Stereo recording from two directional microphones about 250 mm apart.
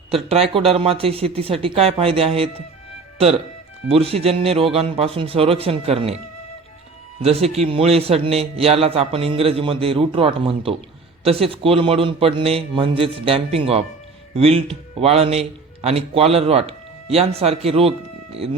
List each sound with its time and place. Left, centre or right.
0.1 s a man's voice: right
3.9 s a man's voice: right
7.2 s a man's voice: right